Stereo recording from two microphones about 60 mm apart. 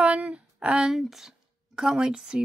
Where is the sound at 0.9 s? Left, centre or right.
Centre.